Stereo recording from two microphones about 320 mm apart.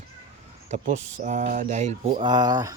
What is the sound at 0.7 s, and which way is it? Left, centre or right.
Mantra, right.